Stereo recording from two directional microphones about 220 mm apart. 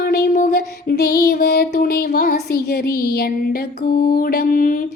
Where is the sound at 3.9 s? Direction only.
40° left (ahead or behind).